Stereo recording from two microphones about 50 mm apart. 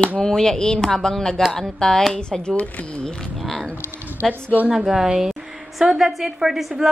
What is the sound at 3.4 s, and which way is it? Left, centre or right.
A woman's voice, centre.